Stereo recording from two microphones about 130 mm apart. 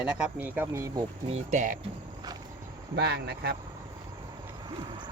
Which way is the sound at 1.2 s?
60° right (ahead or behind).